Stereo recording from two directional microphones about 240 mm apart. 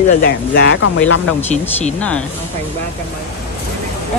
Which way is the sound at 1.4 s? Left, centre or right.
Left.